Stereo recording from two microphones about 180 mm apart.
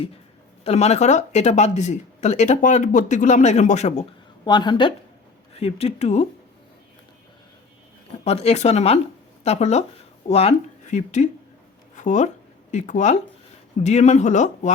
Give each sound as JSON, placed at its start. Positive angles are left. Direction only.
{"t": 0.6, "sound": "speech", "side_deg": 35}
{"t": 4.4, "sound": "a woman's voice", "side_deg": 25}
{"t": 8.2, "sound": "speech", "side_deg": 35}